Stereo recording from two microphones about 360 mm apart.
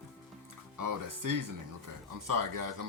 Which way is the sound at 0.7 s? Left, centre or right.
Right.